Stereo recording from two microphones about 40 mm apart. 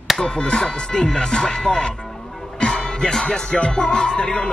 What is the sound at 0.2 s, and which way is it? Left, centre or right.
Music, left.